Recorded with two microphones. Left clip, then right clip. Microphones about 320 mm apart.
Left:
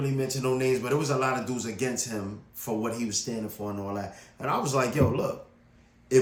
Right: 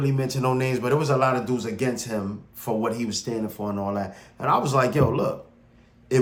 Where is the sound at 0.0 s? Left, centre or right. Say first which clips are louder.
Right 4 dB; centre.